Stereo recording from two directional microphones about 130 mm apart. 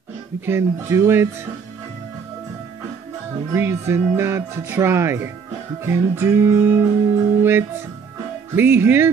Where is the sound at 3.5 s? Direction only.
20° right (ahead or behind).